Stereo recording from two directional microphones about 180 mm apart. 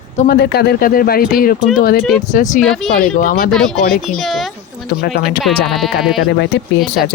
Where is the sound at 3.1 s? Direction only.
50° left (ahead or behind).